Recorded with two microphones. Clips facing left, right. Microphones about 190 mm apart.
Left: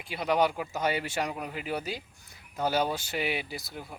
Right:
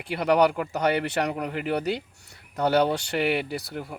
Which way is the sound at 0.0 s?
70° right (ahead or behind).